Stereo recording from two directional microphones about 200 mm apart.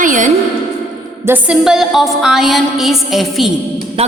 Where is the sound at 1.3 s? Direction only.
5° right (ahead or behind).